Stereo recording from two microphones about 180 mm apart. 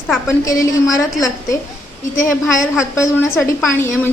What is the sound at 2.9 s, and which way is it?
Speech, 15° left (ahead or behind).